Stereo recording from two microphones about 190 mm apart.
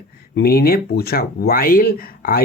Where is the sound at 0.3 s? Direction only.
55° left (ahead or behind).